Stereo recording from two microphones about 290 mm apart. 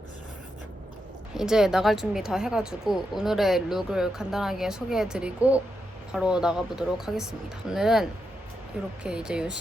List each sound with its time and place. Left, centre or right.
1.3 s speech: centre
9.0 s speech: centre